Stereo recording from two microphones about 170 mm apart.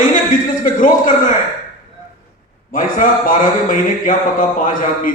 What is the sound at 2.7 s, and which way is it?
A man's voice, 50° left (ahead or behind).